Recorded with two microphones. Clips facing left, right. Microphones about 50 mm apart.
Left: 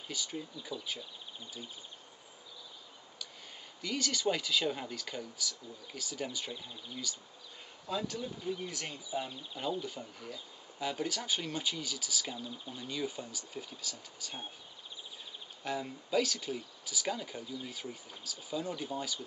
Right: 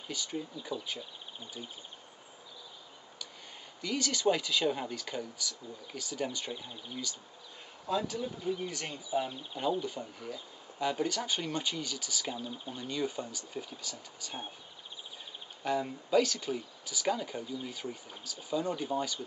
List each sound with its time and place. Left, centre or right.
0.1 s speech: centre
3.8 s speech: centre
9.3 s speech: centre
9.6 s speech: centre
12.4 s speech: centre
12.7 s speech: centre
15.6 s speech: centre